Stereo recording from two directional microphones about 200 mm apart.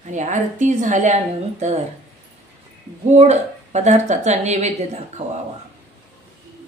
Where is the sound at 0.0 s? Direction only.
35° right (ahead or behind).